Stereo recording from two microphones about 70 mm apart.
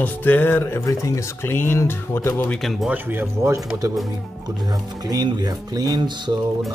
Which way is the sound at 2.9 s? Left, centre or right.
Right.